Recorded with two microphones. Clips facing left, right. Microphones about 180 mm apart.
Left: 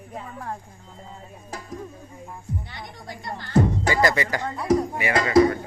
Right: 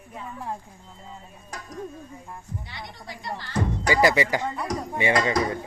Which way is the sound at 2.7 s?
50° left (ahead or behind).